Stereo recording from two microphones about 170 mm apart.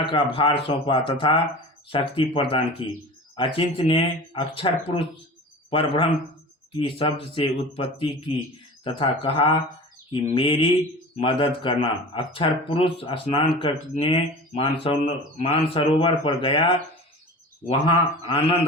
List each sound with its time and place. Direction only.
0.1 s speech: 30° left (ahead or behind)